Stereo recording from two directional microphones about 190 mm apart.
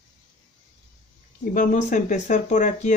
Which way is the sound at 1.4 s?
45° left (ahead or behind).